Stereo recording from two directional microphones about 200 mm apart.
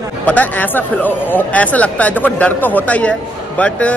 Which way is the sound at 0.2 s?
10° left (ahead or behind).